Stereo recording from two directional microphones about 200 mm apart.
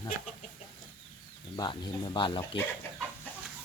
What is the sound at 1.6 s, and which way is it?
Speech, 20° left (ahead or behind).